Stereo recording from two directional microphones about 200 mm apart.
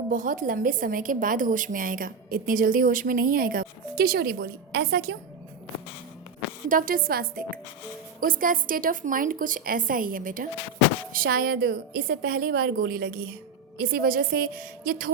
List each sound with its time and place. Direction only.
0.1 s a woman's voice: 40° right (ahead or behind)
6.7 s a woman's voice: 45° right (ahead or behind)